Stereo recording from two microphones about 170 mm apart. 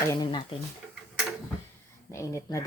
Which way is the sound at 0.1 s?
25° left (ahead or behind).